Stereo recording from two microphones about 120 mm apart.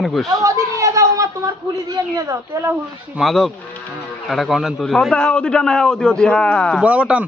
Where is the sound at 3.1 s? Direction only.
Centre (ahead or behind).